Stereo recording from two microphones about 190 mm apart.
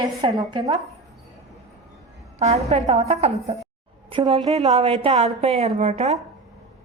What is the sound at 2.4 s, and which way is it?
A woman's voice, 35° right (ahead or behind).